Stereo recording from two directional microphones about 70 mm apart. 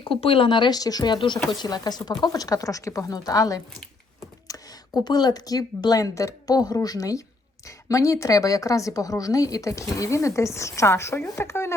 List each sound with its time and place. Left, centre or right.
0.6 s speech: left
1.5 s speech: left
4.9 s speech: left
7.9 s a woman's voice: left